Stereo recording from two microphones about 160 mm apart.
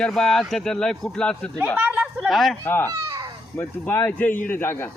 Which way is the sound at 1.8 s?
10° right (ahead or behind).